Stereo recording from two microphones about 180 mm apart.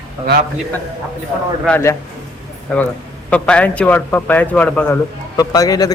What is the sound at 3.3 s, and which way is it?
A man's voice, 5° left (ahead or behind).